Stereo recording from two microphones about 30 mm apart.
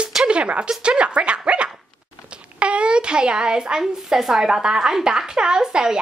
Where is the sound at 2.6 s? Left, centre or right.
Right.